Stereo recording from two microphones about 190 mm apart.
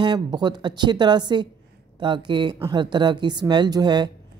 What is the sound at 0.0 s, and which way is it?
Speech, 25° right (ahead or behind).